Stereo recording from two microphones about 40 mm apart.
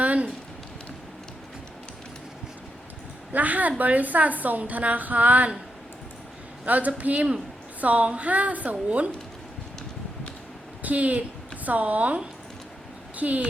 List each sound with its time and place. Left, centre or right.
0.0 s a sound: right
3.3 s a woman's voice: right
6.7 s a woman's voice: right
10.8 s a woman's voice: right